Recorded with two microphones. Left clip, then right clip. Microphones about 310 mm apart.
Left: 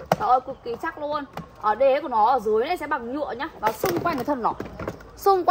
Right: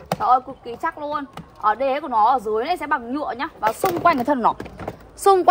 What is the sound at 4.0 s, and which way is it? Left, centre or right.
Speech, right.